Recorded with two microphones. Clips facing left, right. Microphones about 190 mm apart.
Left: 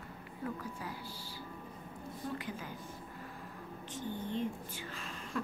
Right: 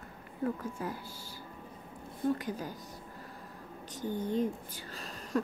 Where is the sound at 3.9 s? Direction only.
40° right (ahead or behind).